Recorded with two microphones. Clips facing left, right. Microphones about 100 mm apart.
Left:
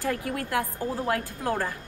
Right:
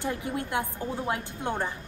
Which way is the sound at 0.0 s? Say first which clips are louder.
Left 2 dB; 20° right (ahead or behind).